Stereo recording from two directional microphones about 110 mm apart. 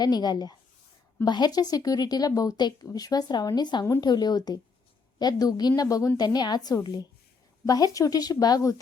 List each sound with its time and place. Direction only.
0.0 s a woman's voice: 40° left (ahead or behind)